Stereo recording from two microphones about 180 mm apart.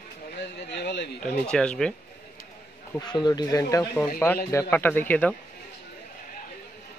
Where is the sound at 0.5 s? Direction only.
70° left (ahead or behind).